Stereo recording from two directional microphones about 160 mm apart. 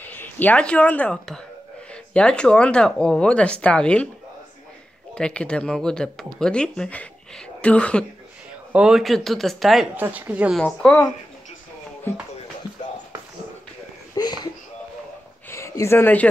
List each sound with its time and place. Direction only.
0.0 s speech: 10° left (ahead or behind)
5.1 s speech: 5° left (ahead or behind)
8.7 s speech: 5° right (ahead or behind)
9.9 s speech: 10° right (ahead or behind)
10.6 s speech: 5° left (ahead or behind)
12.1 s speech: 15° left (ahead or behind)
14.1 s a sound: 25° left (ahead or behind)
15.5 s speech: 20° left (ahead or behind)